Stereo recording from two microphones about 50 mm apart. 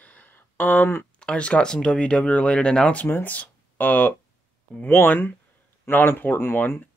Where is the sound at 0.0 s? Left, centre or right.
Left.